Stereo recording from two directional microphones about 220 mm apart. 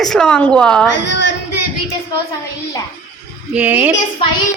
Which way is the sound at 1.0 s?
55° left (ahead or behind).